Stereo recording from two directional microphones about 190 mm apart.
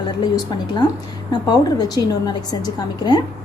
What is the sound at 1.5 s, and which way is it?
A woman's voice, 20° left (ahead or behind).